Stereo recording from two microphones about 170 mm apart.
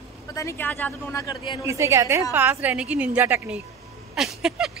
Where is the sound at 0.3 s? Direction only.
20° left (ahead or behind).